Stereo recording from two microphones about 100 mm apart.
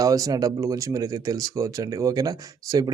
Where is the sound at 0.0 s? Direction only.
35° right (ahead or behind).